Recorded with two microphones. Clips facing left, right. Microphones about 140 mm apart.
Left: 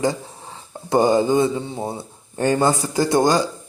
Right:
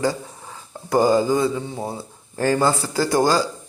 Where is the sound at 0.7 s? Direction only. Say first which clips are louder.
Even; 25° left (ahead or behind).